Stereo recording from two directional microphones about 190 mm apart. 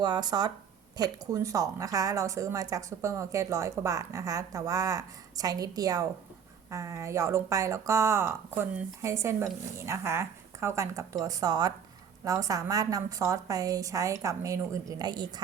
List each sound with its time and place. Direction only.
0.0 s a woman's voice: 20° right (ahead or behind)